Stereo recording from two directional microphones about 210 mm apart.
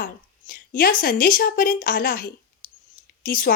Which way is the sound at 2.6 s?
40° left (ahead or behind).